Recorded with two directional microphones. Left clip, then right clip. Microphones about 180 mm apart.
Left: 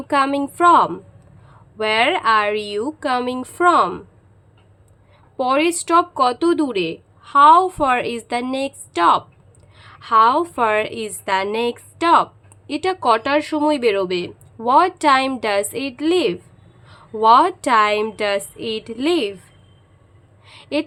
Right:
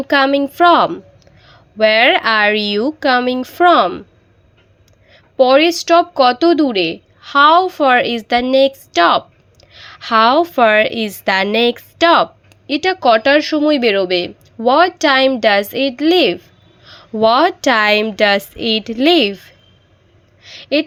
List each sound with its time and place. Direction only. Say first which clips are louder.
0.1 s speech: right 5 dB; 15° right (ahead or behind)
5.1 s a woman's voice: right 8 dB; 15° right (ahead or behind)
20.4 s a sound: right 7 dB; 15° right (ahead or behind)